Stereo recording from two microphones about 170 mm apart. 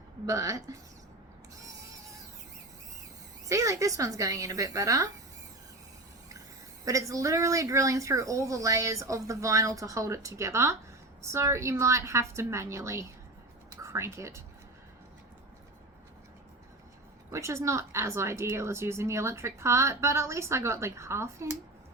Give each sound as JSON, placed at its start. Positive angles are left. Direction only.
{"t": 0.3, "sound": "speech", "side_deg": -20}
{"t": 3.5, "sound": "speech", "side_deg": -20}
{"t": 6.8, "sound": "speech", "side_deg": -20}
{"t": 17.3, "sound": "speech", "side_deg": -15}